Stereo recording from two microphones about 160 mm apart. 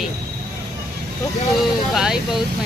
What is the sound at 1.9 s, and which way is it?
Speech, 5° right (ahead or behind).